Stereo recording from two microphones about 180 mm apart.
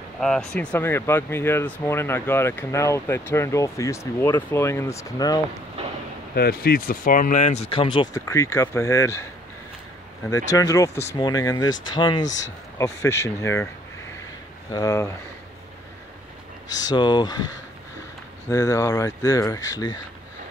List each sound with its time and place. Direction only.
0.2 s speech: 5° left (ahead or behind); by 5.4 s 20° left (ahead or behind)
5.8 s a sound: 35° right (ahead or behind)
6.3 s speech: 60° left (ahead or behind); by 9.3 s 15° left (ahead or behind)
10.3 s speech: 20° left (ahead or behind)
14.7 s speech: 20° left (ahead or behind)
16.6 s speech: 20° left (ahead or behind)
18.5 s speech: 20° left (ahead or behind)